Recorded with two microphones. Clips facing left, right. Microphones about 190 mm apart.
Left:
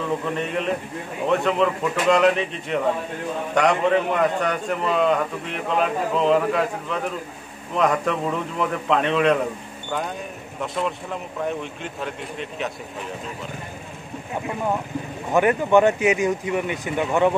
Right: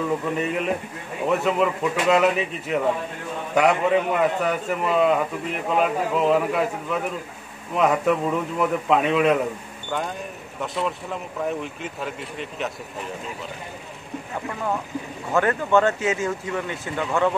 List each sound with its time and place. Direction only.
0.4 s a man's voice: 5° right (ahead or behind)
10.6 s a man's voice: centre (ahead or behind)
14.3 s speech: 20° left (ahead or behind)